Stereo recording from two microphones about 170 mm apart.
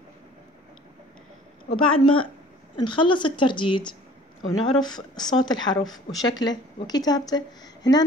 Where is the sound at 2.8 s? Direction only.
30° left (ahead or behind).